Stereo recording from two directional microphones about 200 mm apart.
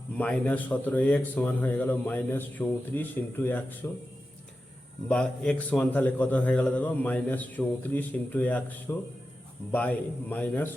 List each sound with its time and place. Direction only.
0.2 s a man's voice: 5° left (ahead or behind)
5.0 s a man's voice: 5° left (ahead or behind)